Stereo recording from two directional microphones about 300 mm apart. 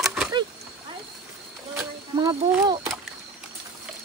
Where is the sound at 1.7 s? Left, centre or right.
Centre.